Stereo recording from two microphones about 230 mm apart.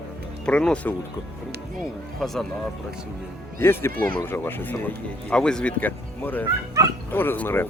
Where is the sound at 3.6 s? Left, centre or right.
Centre.